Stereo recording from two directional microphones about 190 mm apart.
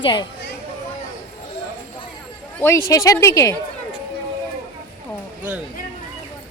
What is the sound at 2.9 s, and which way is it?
Speech, 15° left (ahead or behind).